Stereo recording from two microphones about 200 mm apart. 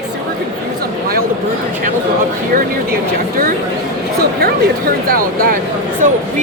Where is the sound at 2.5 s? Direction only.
45° right (ahead or behind).